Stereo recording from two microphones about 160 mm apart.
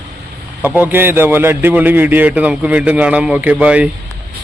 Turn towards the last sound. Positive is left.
turn(degrees=-5)  # may be behind; listen again after turning